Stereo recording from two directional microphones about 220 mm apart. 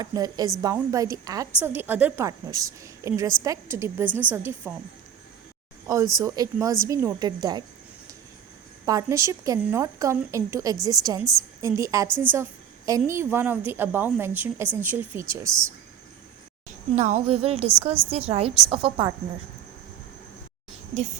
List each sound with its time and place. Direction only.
0.0 s a woman's voice: 15° right (ahead or behind)
6.1 s a woman's voice: 15° right (ahead or behind)
8.9 s a woman's voice: 15° right (ahead or behind)
12.0 s a woman's voice: 5° left (ahead or behind)
12.3 s a woman's voice: 15° right (ahead or behind)
16.9 s a woman's voice: 30° right (ahead or behind)